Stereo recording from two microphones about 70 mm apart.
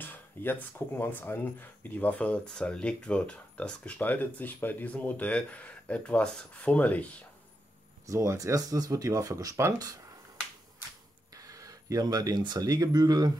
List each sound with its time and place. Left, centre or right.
0.0 s speech: left
8.1 s speech: right
11.3 s speech: right